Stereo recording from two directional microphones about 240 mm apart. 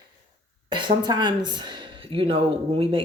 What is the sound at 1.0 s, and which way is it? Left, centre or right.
Speech, centre.